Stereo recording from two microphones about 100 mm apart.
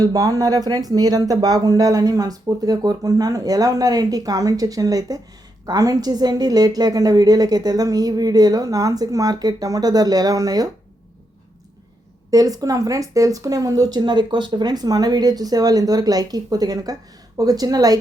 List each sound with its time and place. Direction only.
0.0 s speech: 40° right (ahead or behind)
12.3 s speech: 40° right (ahead or behind)